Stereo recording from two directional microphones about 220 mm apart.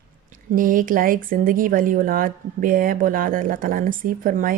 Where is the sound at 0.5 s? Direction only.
40° right (ahead or behind).